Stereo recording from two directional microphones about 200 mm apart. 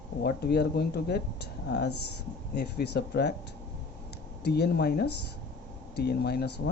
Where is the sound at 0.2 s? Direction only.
55° left (ahead or behind).